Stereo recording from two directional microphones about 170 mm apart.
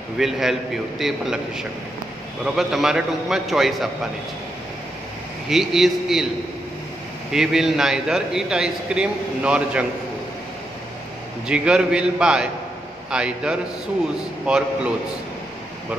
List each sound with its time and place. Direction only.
0.2 s a man's voice: centre (ahead or behind)
5.5 s a man's voice: centre (ahead or behind)
7.3 s a man's voice: centre (ahead or behind)
11.4 s a man's voice: 5° right (ahead or behind)